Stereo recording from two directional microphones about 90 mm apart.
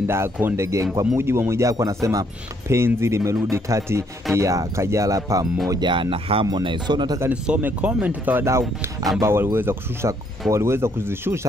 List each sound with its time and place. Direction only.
0.0 s speech: 30° right (ahead or behind)
5.8 s speech: 65° right (ahead or behind); by 6.4 s 90° right
6.6 s speech: 60° right (ahead or behind)
7.4 s speech: 15° right (ahead or behind)
8.5 s speech: 30° right (ahead or behind)